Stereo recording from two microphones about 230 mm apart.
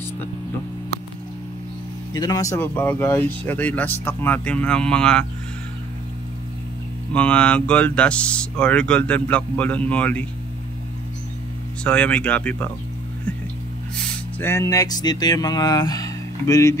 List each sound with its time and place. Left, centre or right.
2.1 s speech: centre
7.2 s speech: centre
11.8 s speech: centre
14.4 s speech: centre